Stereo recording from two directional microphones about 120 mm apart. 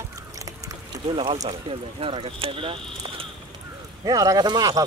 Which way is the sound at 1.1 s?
50° right (ahead or behind).